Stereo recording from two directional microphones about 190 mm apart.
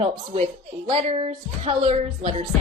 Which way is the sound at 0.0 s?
30° right (ahead or behind).